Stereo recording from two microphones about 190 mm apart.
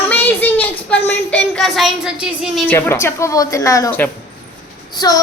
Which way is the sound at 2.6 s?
10° left (ahead or behind).